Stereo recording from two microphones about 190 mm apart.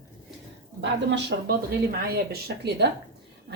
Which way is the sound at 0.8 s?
65° right (ahead or behind).